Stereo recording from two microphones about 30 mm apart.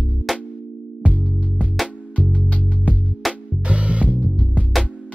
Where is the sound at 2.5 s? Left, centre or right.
Left.